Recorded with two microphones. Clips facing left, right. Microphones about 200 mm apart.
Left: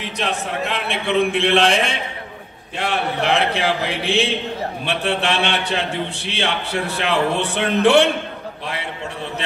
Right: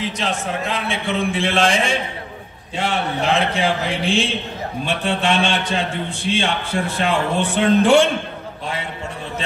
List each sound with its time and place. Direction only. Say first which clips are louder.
0.2 s a man's voice: left 4 dB; 60° left (ahead or behind)